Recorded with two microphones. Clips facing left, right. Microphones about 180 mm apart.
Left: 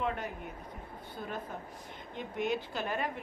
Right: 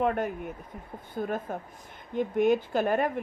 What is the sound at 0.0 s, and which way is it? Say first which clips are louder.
A woman's voice: right 8 dB; 50° right (ahead or behind).